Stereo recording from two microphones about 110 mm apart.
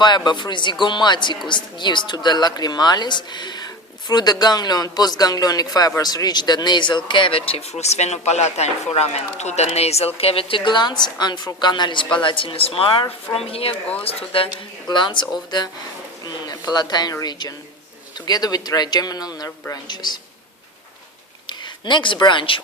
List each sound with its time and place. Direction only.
0.0 s a woman's voice: 45° left (ahead or behind); by 10.1 s 70° left (ahead or behind)
10.2 s a woman's voice: 60° left (ahead or behind)
14.8 s a woman's voice: 45° left (ahead or behind)
21.4 s speech: 45° left (ahead or behind)